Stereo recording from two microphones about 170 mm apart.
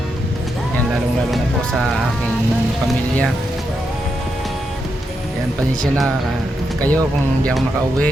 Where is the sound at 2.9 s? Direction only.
Centre (ahead or behind).